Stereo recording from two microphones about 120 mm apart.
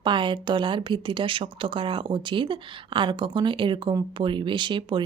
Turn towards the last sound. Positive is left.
turn(degrees=-45)  # may be behind; listen again after turning